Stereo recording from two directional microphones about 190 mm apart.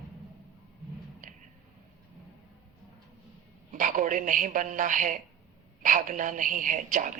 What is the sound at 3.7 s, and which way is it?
A man's voice, 45° right (ahead or behind).